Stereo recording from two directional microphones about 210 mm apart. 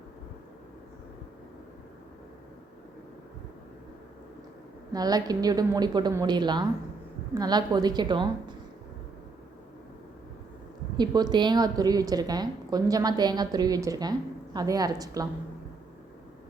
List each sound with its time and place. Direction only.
4.9 s a woman's voice: 20° right (ahead or behind)
10.9 s a woman's voice: 20° right (ahead or behind)